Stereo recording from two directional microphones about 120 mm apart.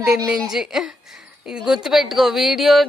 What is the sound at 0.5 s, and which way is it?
Speech, 5° right (ahead or behind).